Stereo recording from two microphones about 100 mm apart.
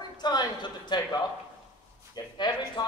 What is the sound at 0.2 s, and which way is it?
Speech, 45° left (ahead or behind).